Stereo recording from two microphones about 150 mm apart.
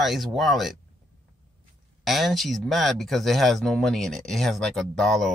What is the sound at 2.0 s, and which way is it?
Speech, centre (ahead or behind).